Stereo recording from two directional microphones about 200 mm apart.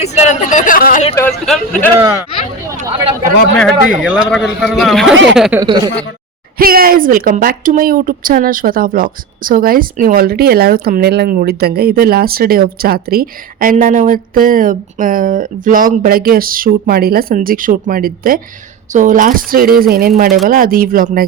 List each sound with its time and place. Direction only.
0.0 s speech: 35° left (ahead or behind)
1.3 s a man's voice: centre (ahead or behind)
2.0 s speech: 10° right (ahead or behind)
2.6 s a sound: 15° right (ahead or behind)
4.0 s a man's voice: 5° right (ahead or behind)
5.5 s speech: 15° right (ahead or behind)
6.6 s a woman's voice: 45° right (ahead or behind)